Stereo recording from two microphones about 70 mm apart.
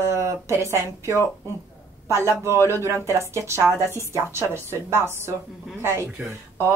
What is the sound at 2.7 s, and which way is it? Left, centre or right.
A woman's voice, right.